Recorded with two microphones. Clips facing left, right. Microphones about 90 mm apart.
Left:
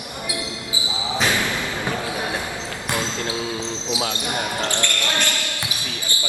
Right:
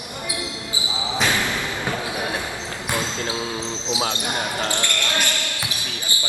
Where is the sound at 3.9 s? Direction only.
25° right (ahead or behind).